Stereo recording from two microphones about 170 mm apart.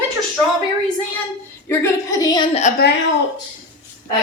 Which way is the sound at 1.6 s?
20° left (ahead or behind).